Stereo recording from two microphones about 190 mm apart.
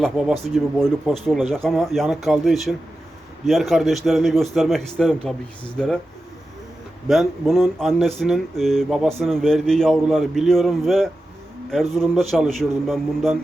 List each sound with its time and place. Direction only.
0.0 s speech: centre (ahead or behind)
7.1 s speech: centre (ahead or behind)